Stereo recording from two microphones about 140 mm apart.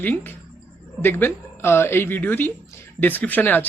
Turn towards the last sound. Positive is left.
turn(degrees=15)  # may be behind; listen again after turning